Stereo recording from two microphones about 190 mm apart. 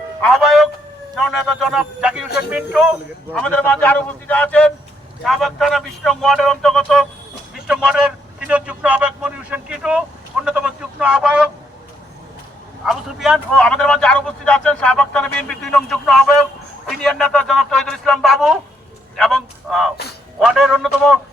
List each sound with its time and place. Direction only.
0.2 s music: centre (ahead or behind)
1.1 s a man's voice: centre (ahead or behind)
12.8 s speech: centre (ahead or behind)